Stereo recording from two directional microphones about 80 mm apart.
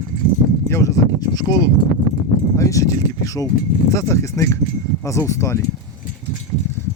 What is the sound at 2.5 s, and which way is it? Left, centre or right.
Speech, left.